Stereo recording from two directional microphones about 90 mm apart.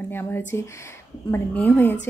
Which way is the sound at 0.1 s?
25° left (ahead or behind).